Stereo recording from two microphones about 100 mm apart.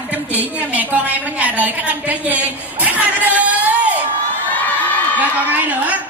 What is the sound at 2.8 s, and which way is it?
Music, 15° right (ahead or behind).